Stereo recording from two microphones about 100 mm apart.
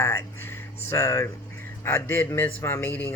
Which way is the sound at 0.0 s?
25° left (ahead or behind).